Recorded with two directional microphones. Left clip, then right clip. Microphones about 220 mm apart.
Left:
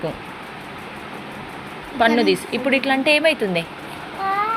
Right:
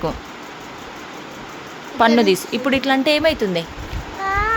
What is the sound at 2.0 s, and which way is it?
Speech, 25° right (ahead or behind).